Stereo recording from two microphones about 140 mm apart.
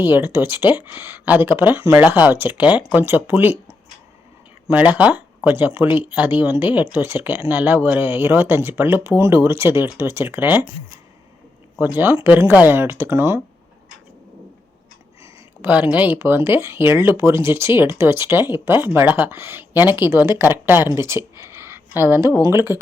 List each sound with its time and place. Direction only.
0.0 s speech: 15° right (ahead or behind)
4.7 s speech: 10° right (ahead or behind)
11.8 s speech: 15° right (ahead or behind)
15.2 s speech: 15° right (ahead or behind)